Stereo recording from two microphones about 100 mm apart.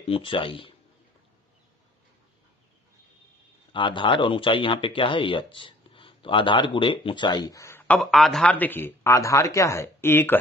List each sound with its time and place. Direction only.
0.0 s speech: 65° left (ahead or behind)
3.7 s speech: 55° left (ahead or behind); by 7.8 s 30° left (ahead or behind)
8.0 s a man's voice: centre (ahead or behind)
8.5 s speech: 20° left (ahead or behind)
9.1 s speech: 30° left (ahead or behind)